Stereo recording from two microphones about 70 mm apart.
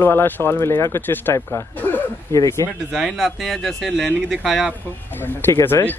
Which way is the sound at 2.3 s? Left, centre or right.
Left.